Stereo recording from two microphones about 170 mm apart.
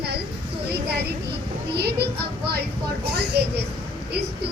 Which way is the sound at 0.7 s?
75° right (ahead or behind).